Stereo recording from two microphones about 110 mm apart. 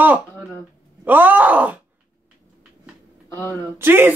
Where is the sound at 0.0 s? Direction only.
15° right (ahead or behind).